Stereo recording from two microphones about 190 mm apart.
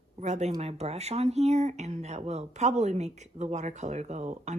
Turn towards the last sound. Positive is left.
turn(degrees=-35)  # may be behind; listen again after turning